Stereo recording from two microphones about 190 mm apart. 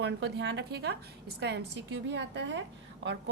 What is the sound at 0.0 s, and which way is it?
A woman's voice, 65° right (ahead or behind).